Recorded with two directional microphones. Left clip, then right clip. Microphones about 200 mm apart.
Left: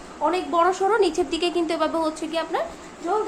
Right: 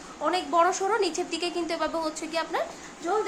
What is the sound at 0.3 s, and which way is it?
A woman's voice, centre (ahead or behind).